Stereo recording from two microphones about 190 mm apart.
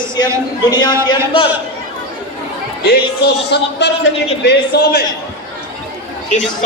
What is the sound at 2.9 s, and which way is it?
Speech, 60° left (ahead or behind).